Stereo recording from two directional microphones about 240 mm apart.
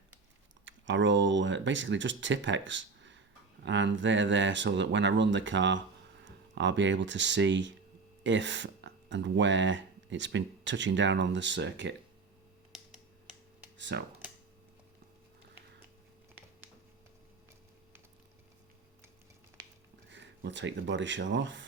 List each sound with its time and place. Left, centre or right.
0.6 s speech: right
13.7 s speech: right
20.1 s speech: right